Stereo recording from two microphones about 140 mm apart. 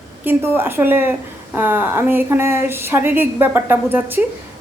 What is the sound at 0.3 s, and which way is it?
A woman's voice, 15° right (ahead or behind).